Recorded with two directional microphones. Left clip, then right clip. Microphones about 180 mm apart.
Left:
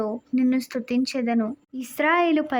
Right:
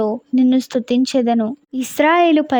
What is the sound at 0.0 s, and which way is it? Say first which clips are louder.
Speech: right 8 dB; 40° right (ahead or behind).